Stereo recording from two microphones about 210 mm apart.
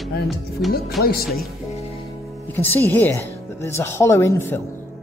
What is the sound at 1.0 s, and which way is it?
Speech, 45° left (ahead or behind).